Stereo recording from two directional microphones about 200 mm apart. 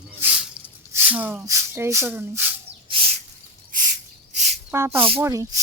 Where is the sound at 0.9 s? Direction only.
10° right (ahead or behind).